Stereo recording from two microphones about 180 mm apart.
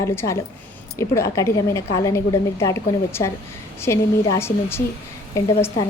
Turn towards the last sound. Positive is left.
turn(degrees=20)  # may be behind; listen again after turning